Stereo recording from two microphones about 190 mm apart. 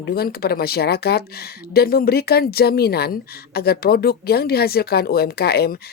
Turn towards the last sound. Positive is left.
turn(degrees=55)  # may be behind; listen again after turning